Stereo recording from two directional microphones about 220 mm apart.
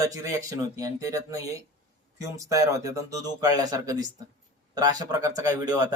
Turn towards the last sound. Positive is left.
turn(degrees=-15)  # may be behind; listen again after turning